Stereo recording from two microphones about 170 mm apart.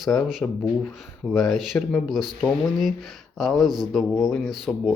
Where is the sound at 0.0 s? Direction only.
Centre (ahead or behind).